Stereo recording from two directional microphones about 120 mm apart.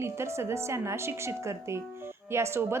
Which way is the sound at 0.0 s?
20° right (ahead or behind).